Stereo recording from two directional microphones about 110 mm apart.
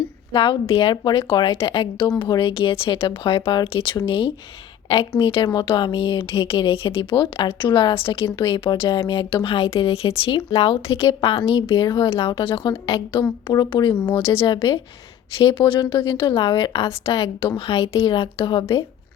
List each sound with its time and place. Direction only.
0.3 s speech: 55° left (ahead or behind)
2.0 s speech: 40° left (ahead or behind); by 11.3 s 60° left (ahead or behind)
11.9 s speech: 35° left (ahead or behind)
12.3 s speech: 50° left (ahead or behind)
13.5 s speech: 40° left (ahead or behind)
14.0 s speech: 55° left (ahead or behind)